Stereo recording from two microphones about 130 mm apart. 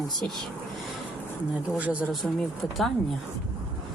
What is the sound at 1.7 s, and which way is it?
Speech, 10° right (ahead or behind).